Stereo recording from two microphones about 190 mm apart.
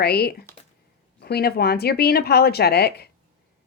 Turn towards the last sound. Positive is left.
turn(degrees=55)  # may be behind; listen again after turning